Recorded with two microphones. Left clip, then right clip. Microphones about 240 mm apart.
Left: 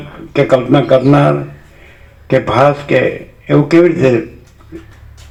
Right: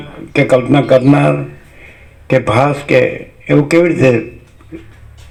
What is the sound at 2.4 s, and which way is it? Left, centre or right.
Speech, right.